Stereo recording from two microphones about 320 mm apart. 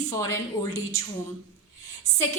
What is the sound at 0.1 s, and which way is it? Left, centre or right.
Speech, centre.